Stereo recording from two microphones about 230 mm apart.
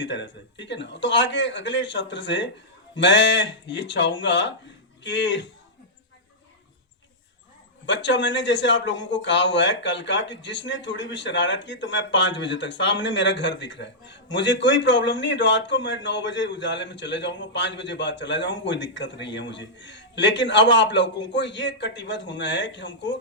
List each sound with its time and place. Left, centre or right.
0.0 s speech: left
7.9 s speech: left